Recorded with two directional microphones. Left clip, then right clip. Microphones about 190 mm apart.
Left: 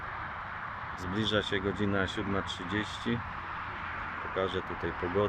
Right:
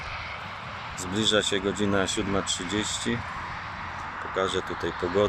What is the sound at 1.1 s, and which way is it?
Speech, 5° right (ahead or behind).